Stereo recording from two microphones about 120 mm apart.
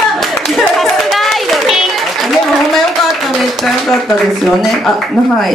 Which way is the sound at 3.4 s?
Centre (ahead or behind).